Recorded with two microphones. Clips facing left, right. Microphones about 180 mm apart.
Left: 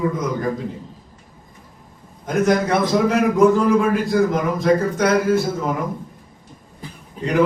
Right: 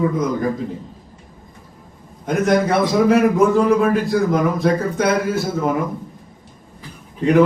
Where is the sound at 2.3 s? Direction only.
Centre (ahead or behind).